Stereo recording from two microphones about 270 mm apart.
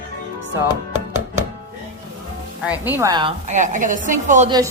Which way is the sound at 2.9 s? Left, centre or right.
Centre.